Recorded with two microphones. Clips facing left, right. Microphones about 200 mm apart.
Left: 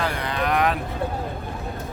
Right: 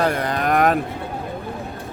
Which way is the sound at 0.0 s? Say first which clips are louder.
Right 5 dB; 45° right (ahead or behind).